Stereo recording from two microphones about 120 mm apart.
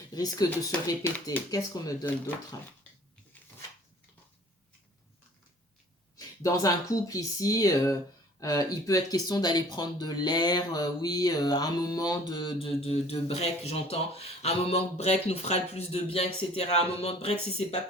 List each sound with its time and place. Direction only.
0.1 s speech: 30° left (ahead or behind)
6.1 s speech: 30° left (ahead or behind); by 17.7 s 55° left (ahead or behind)